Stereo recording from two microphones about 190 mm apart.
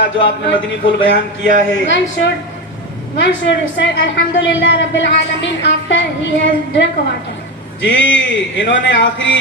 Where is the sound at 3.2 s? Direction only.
70° left (ahead or behind).